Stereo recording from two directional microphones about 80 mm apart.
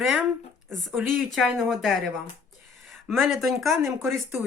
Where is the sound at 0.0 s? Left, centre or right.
Centre.